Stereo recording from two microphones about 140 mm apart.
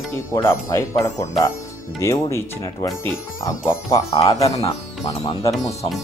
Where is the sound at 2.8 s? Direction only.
20° left (ahead or behind).